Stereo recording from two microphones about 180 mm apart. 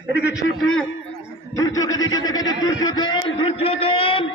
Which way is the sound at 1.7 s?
20° left (ahead or behind).